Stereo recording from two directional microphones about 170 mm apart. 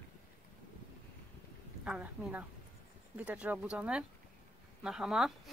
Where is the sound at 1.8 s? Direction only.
5° right (ahead or behind).